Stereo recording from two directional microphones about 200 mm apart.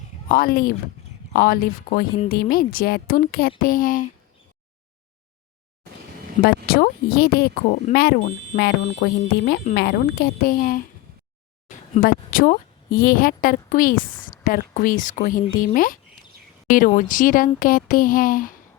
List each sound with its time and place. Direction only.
0.3 s speech: 45° left (ahead or behind)
6.4 s speech: 50° left (ahead or behind)
12.0 s speech: 45° left (ahead or behind)